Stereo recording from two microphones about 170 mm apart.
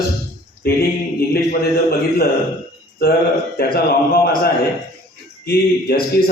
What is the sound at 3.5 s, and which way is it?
Speech, 65° left (ahead or behind).